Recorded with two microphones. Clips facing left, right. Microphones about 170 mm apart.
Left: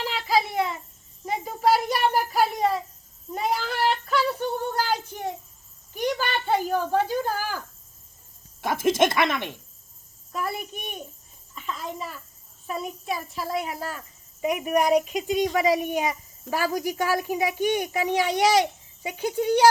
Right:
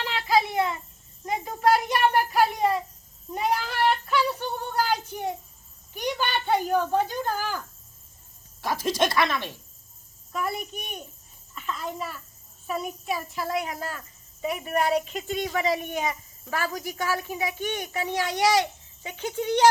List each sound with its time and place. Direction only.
0.0 s a sound: centre (ahead or behind)
1.2 s speech: 5° left (ahead or behind)
3.3 s child singing: centre (ahead or behind)
5.9 s speech: centre (ahead or behind)
8.6 s speech: 20° left (ahead or behind)
10.3 s speech: centre (ahead or behind)
11.5 s a sound: centre (ahead or behind)
12.6 s a child's voice: centre (ahead or behind)